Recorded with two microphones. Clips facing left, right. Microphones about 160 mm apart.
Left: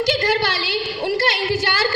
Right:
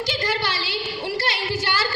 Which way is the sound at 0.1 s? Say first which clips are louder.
Left 6 dB; 60° left (ahead or behind).